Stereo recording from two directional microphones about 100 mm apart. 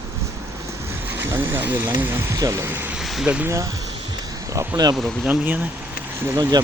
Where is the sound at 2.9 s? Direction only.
5° right (ahead or behind).